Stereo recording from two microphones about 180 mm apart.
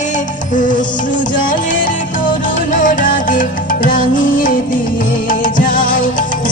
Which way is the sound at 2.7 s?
45° left (ahead or behind).